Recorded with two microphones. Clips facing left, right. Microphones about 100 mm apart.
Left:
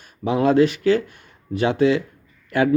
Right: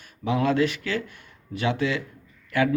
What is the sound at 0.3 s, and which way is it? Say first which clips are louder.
A man's voice: left 6 dB; 30° left (ahead or behind).